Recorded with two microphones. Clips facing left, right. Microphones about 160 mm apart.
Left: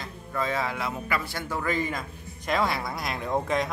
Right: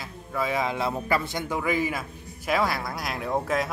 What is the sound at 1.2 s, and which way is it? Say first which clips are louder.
Speech: right 2 dB; 15° right (ahead or behind).